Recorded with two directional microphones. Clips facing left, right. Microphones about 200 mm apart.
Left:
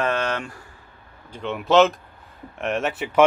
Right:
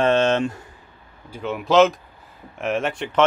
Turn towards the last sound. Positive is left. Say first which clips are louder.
# left 1 dB
turn(degrees=5)  # may be behind; listen again after turning